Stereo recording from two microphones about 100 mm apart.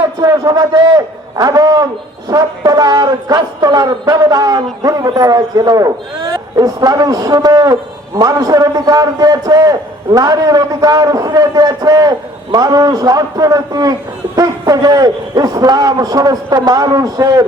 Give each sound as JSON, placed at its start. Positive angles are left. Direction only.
{"t": 0.2, "sound": "a man's voice", "side_deg": -40}